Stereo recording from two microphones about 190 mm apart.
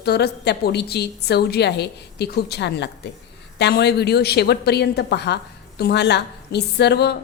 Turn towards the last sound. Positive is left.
turn(degrees=60)  # may be behind; listen again after turning